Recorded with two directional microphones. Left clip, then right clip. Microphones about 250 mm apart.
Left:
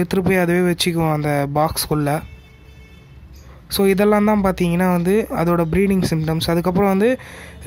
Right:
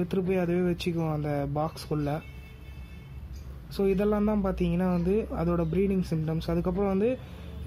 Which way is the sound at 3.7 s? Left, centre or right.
Left.